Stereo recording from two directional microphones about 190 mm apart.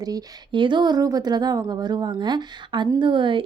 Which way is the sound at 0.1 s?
25° right (ahead or behind).